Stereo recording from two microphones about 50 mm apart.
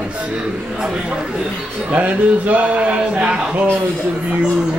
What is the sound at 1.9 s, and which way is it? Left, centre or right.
Speech, right.